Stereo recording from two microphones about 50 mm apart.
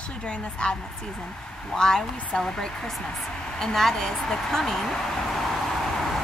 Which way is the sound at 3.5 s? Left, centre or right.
Centre.